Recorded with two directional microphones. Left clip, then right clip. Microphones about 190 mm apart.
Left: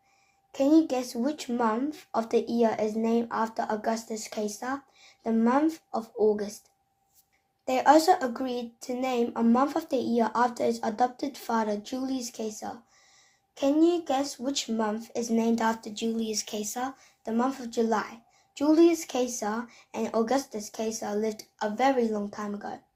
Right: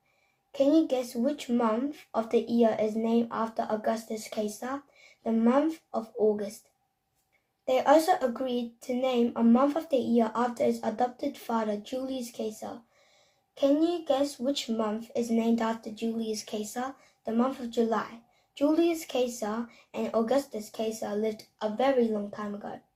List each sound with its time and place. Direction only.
0.5 s speech: 35° left (ahead or behind)
7.6 s speech: 35° left (ahead or behind)